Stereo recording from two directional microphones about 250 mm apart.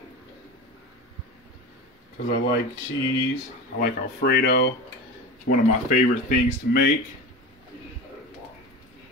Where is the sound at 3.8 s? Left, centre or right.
Left.